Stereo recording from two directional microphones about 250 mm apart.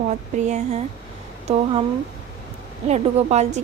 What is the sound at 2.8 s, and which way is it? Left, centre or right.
Speech, right.